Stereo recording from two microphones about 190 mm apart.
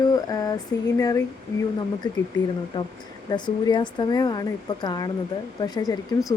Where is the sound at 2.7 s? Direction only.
25° left (ahead or behind).